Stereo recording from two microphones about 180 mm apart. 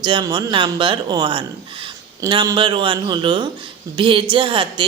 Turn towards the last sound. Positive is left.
turn(degrees=-25)  # may be behind; listen again after turning